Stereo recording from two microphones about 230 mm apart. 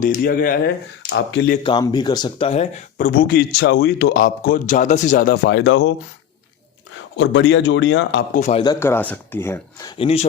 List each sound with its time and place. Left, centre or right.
0.0 s a man's voice: left
1.6 s speech: centre
3.1 s a man's voice: left
5.5 s speech: left
7.2 s speech: left
8.3 s a man's voice: left
8.6 s speech: centre
10.0 s speech: left